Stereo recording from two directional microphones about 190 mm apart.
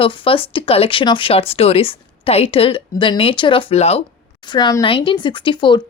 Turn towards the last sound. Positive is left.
turn(degrees=25)  # may be behind; listen again after turning